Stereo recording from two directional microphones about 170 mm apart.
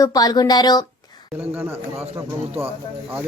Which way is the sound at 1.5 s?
15° right (ahead or behind).